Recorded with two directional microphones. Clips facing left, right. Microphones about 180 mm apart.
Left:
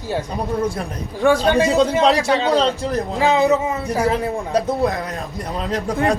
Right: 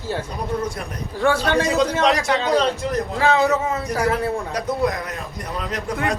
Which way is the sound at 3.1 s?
15° left (ahead or behind).